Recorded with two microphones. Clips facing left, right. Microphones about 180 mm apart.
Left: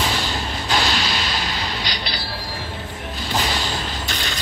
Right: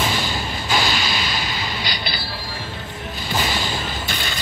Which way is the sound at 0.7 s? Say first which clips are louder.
Even; 5° right (ahead or behind).